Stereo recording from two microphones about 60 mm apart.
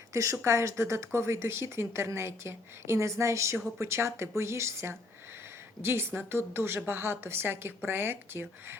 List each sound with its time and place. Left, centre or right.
0.1 s a woman's voice: right